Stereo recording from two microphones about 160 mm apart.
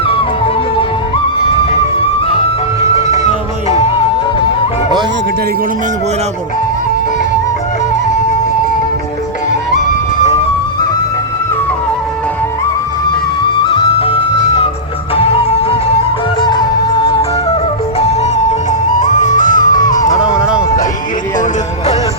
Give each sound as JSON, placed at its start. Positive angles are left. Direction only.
{"t": 2.9, "sound": "music", "side_deg": 45}
{"t": 13.7, "sound": "music", "side_deg": 35}
{"t": 18.9, "sound": "music", "side_deg": 50}
{"t": 20.1, "sound": "music", "side_deg": 20}